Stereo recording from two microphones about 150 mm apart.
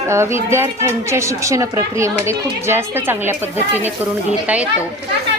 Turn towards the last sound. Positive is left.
turn(degrees=-10)  # may be behind; listen again after turning